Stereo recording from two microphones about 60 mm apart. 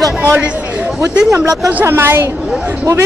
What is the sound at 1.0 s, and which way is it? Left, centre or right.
Speech, right.